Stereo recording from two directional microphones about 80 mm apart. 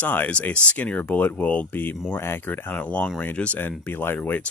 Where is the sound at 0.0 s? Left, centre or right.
Left.